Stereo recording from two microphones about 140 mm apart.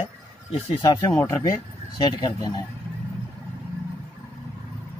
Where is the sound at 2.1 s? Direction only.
30° left (ahead or behind).